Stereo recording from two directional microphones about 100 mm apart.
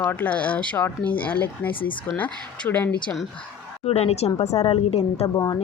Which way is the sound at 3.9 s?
90° left.